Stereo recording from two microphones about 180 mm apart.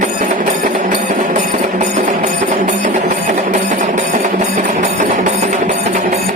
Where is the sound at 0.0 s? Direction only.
45° right (ahead or behind).